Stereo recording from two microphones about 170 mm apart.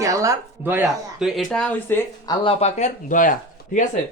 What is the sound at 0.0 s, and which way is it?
Speech, 20° right (ahead or behind).